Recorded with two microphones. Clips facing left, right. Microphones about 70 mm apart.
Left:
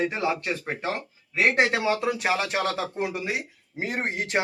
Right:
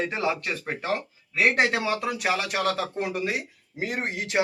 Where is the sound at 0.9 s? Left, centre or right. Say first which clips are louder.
Even; left.